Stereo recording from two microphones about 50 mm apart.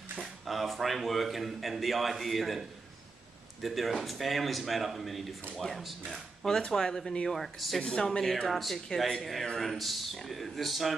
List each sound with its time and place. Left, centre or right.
0.2 s speech: centre
3.6 s speech: centre
7.8 s speech: centre